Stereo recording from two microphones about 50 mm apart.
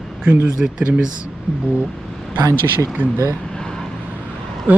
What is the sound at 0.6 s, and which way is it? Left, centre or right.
Speech, centre.